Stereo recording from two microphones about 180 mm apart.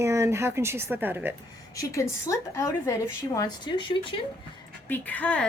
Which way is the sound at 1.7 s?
15° left (ahead or behind).